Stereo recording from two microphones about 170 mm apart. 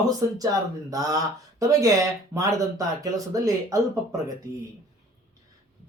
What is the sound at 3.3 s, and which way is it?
Speech, 20° right (ahead or behind).